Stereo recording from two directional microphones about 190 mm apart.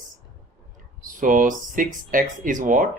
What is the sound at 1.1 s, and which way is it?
Speech, 45° right (ahead or behind).